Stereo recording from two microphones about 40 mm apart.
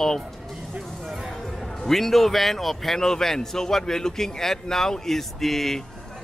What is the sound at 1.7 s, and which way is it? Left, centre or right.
A man's voice, centre.